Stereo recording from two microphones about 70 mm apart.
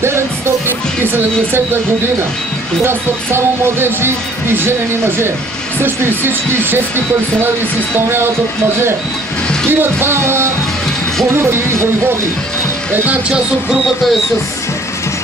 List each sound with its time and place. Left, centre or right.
0.7 s speech: right
2.8 s speech: right
9.7 s speech: right
12.9 s music: right
13.3 s speech: centre